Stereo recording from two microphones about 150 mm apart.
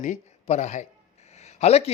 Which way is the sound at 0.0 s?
50° left (ahead or behind).